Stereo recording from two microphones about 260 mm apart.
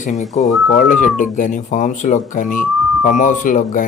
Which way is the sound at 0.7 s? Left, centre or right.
Left.